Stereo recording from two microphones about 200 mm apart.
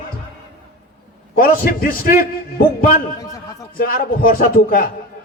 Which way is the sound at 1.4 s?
50° left (ahead or behind).